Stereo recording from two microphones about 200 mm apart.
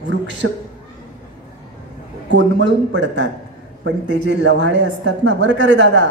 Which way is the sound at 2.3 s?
65° right (ahead or behind).